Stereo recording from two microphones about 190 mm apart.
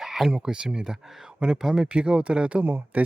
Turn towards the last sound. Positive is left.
turn(degrees=-10)  # may be behind; listen again after turning